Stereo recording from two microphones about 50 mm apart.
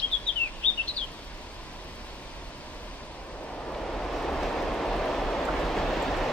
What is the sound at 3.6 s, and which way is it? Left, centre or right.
Vehicle, centre.